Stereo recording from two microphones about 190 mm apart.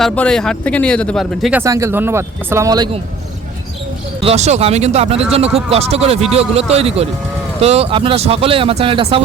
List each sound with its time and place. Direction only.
0.0 s speech: 5° left (ahead or behind)
1.6 s speech: 15° right (ahead or behind)
4.2 s speech: 35° right (ahead or behind)